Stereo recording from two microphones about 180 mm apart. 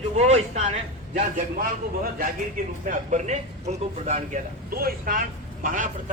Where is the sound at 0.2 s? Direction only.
40° right (ahead or behind).